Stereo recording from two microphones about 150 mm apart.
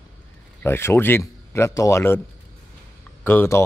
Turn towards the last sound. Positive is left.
turn(degrees=15)  # may be behind; listen again after turning